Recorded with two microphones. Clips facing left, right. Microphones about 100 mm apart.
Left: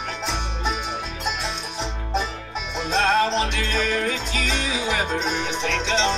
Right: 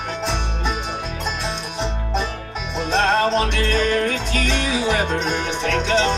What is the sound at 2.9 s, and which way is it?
Music, 55° right (ahead or behind).